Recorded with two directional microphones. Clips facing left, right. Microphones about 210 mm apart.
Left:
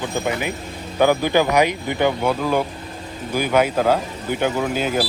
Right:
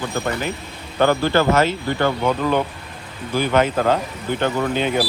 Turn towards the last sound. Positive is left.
turn(degrees=5)  # may be behind; listen again after turning